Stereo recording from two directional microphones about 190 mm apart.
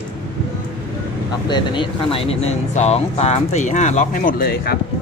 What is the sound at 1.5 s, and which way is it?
Speech, 25° left (ahead or behind).